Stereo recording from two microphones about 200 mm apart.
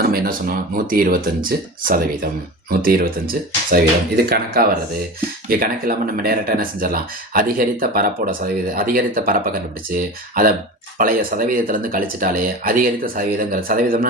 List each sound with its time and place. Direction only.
0.0 s speech: 45° right (ahead or behind)